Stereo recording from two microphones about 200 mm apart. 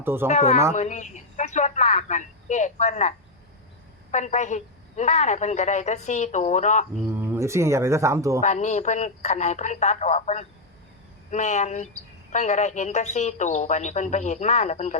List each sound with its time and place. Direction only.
0.0 s speech: 10° right (ahead or behind)
0.3 s a woman's voice: 35° left (ahead or behind)
7.1 s speech: 15° right (ahead or behind)
8.4 s a woman's voice: 35° left (ahead or behind)